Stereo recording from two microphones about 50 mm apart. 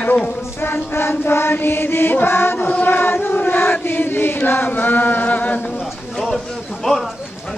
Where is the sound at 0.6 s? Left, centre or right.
Left.